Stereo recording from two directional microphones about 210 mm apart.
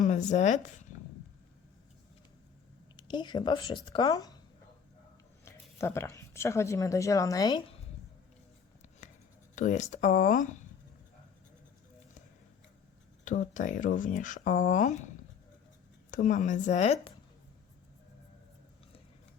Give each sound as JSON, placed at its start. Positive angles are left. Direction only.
{"t": 0.0, "sound": "speech", "side_deg": 35}
{"t": 2.9, "sound": "speech", "side_deg": 20}
{"t": 5.5, "sound": "speech", "side_deg": 10}
{"t": 9.6, "sound": "speech", "side_deg": 35}
{"t": 13.2, "sound": "speech", "side_deg": 35}
{"t": 16.1, "sound": "speech", "side_deg": 35}